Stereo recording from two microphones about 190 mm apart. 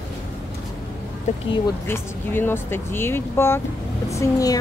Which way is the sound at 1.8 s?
10° left (ahead or behind).